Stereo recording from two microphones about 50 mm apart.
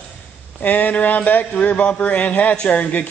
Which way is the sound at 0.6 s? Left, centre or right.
Left.